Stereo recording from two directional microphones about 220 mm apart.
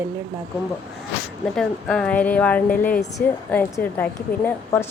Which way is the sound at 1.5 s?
Centre (ahead or behind).